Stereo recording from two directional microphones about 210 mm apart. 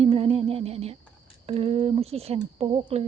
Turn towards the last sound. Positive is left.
turn(degrees=-25)  # may be behind; listen again after turning